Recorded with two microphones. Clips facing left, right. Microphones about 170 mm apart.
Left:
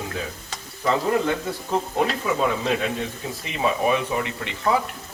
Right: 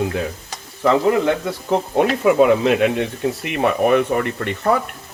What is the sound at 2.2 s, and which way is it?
Speech, 70° right (ahead or behind).